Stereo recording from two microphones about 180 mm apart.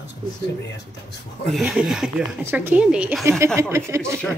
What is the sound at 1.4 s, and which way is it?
Speech, 5° right (ahead or behind).